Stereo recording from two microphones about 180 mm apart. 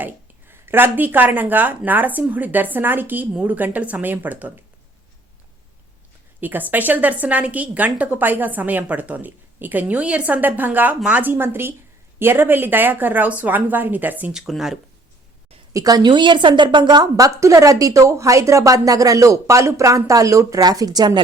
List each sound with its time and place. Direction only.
0.0 s a woman's voice: 10° right (ahead or behind)
6.4 s a woman's voice: 10° right (ahead or behind)
15.7 s a woman's voice: 20° right (ahead or behind)